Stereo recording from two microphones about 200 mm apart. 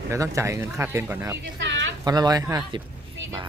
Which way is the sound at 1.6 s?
65° right (ahead or behind).